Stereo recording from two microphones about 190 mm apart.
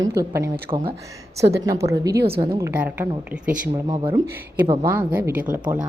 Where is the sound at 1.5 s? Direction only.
15° right (ahead or behind).